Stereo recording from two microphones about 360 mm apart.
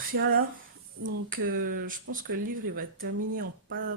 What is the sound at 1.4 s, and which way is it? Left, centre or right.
Speech, right.